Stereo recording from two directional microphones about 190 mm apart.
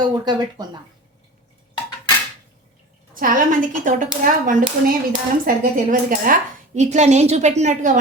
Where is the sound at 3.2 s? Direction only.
45° right (ahead or behind).